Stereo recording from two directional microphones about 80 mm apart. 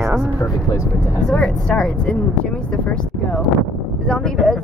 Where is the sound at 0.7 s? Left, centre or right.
Left.